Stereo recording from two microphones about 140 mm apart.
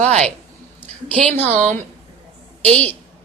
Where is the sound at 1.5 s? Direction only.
60° right (ahead or behind).